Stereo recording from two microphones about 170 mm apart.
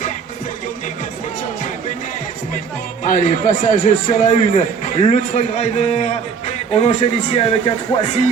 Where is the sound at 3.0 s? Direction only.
45° left (ahead or behind).